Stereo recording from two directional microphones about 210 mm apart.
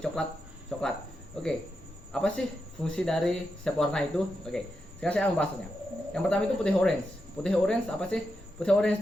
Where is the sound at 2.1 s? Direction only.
5° left (ahead or behind).